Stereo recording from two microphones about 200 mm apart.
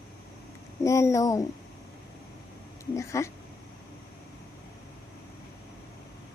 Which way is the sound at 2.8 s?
15° left (ahead or behind).